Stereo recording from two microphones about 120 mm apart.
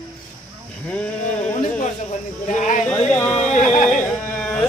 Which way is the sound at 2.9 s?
20° left (ahead or behind).